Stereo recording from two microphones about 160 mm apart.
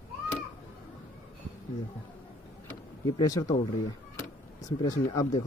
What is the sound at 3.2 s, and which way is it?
Speech, 25° left (ahead or behind).